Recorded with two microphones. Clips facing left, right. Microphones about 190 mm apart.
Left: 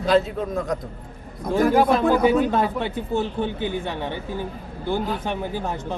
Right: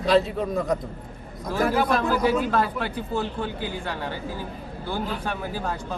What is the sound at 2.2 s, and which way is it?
Speech, 20° left (ahead or behind).